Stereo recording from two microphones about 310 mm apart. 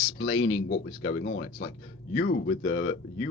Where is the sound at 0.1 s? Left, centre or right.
Left.